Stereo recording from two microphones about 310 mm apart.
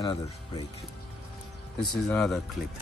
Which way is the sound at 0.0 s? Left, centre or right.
Centre.